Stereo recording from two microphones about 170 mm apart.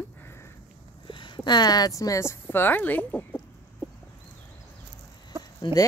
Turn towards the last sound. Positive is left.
turn(degrees=25)  # may be behind; listen again after turning